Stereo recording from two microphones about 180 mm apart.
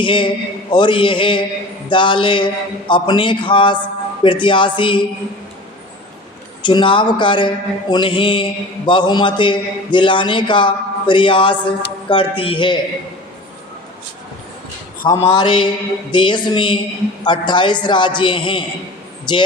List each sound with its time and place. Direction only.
0.0 s a man's voice: 25° left (ahead or behind)
6.6 s a man's voice: 25° left (ahead or behind)
15.0 s a man's voice: 20° left (ahead or behind)